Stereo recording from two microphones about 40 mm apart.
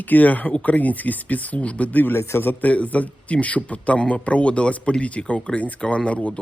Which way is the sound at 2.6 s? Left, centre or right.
Left.